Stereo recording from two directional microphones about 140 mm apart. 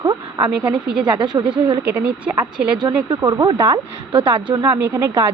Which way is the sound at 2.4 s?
35° right (ahead or behind).